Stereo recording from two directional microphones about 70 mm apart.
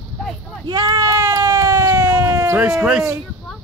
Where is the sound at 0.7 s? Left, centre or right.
Right.